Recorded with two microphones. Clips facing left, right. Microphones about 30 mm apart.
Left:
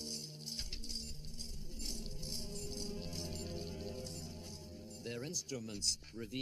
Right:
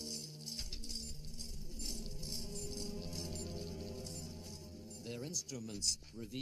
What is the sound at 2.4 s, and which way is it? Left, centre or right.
Music, centre.